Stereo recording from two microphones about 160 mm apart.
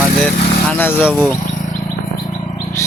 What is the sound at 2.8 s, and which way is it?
Bird, 20° left (ahead or behind).